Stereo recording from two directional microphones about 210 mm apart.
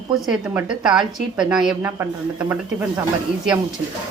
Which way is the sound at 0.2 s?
5° right (ahead or behind).